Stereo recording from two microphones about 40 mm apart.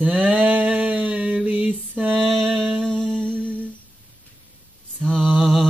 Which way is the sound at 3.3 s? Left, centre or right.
Right.